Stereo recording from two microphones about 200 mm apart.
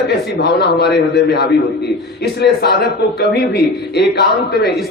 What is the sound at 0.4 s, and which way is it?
A man's voice, 55° left (ahead or behind).